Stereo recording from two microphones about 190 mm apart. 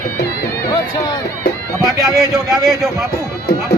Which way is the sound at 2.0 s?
20° right (ahead or behind).